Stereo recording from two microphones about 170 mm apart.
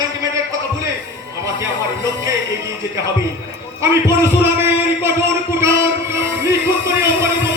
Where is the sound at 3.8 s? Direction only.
15° right (ahead or behind).